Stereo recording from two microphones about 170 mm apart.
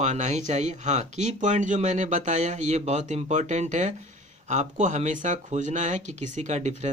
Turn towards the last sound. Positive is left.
turn(degrees=-45)  # may be behind; listen again after turning